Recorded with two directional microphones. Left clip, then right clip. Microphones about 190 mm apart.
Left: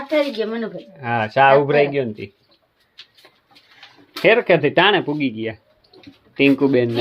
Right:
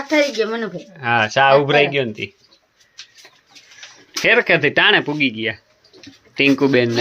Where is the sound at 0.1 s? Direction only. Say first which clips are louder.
Right 3 dB; 45° right (ahead or behind).